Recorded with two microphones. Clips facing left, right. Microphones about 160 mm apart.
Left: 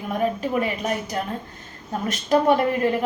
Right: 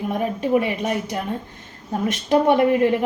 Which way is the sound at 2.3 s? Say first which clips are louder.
Right 2 dB; 20° right (ahead or behind).